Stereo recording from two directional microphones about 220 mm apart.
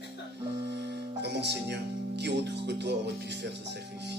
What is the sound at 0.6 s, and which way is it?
Speech, 50° right (ahead or behind).